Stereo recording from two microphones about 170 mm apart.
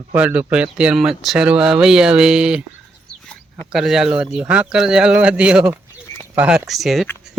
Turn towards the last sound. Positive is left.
turn(degrees=0)  # may be behind; listen again after turning